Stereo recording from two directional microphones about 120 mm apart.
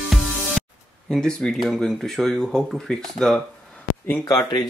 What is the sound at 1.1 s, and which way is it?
Speech, 5° left (ahead or behind).